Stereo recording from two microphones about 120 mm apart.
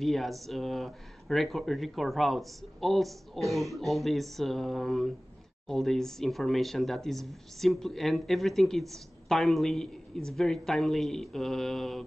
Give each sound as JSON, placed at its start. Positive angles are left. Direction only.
{"t": 0.0, "sound": "speech", "side_deg": 0}